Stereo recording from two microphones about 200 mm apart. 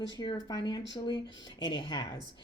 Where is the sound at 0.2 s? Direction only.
20° left (ahead or behind).